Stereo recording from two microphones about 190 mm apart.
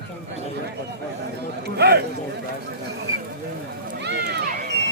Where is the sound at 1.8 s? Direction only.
60° right (ahead or behind).